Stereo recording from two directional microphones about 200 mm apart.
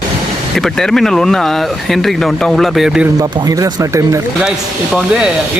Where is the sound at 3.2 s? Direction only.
15° right (ahead or behind).